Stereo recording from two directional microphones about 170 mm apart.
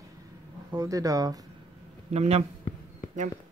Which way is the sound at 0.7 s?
20° right (ahead or behind).